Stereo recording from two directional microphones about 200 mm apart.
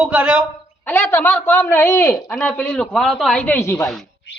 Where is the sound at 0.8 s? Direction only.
10° left (ahead or behind).